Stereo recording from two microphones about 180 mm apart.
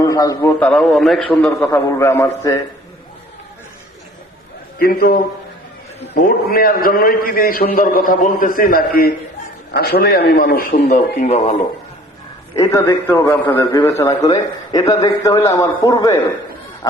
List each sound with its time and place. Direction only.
0.0 s a man's voice: 20° left (ahead or behind)
0.6 s a man's voice: centre (ahead or behind)
4.8 s a man's voice: 55° left (ahead or behind); by 11.5 s 35° left (ahead or behind)
12.5 s a man's voice: 15° left (ahead or behind)